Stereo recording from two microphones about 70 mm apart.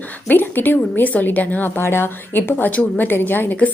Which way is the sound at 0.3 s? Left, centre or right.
Left.